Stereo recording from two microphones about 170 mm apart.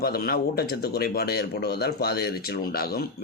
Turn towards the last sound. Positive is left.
turn(degrees=60)  # may be behind; listen again after turning